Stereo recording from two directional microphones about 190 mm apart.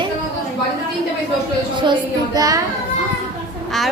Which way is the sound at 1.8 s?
20° right (ahead or behind).